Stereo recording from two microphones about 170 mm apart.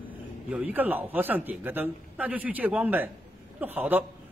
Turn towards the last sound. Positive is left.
turn(degrees=-10)  # may be behind; listen again after turning